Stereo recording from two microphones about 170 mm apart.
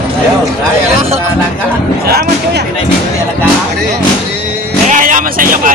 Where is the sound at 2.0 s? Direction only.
65° right (ahead or behind).